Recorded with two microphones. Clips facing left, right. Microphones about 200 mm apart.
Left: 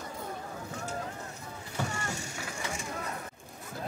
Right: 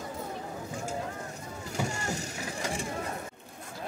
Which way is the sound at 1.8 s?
10° right (ahead or behind).